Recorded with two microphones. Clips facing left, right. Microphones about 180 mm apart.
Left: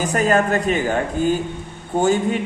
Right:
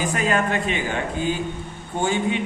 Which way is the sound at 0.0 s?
40° left (ahead or behind).